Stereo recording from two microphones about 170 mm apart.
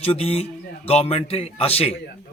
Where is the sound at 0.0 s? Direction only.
35° left (ahead or behind).